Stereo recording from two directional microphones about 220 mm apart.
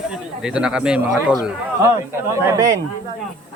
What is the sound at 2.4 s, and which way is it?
Speech, 15° right (ahead or behind).